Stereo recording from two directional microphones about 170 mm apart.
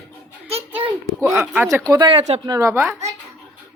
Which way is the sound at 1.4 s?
15° right (ahead or behind).